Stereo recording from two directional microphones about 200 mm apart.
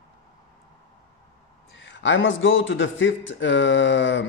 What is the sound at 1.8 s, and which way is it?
A man's voice, 65° left (ahead or behind).